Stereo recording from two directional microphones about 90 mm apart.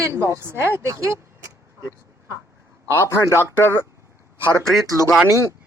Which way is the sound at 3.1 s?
30° left (ahead or behind).